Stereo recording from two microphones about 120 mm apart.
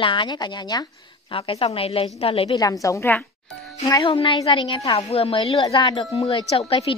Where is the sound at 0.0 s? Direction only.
40° left (ahead or behind).